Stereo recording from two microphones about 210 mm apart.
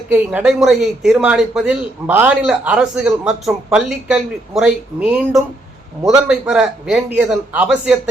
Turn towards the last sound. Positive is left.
turn(degrees=-5)  # may be behind; listen again after turning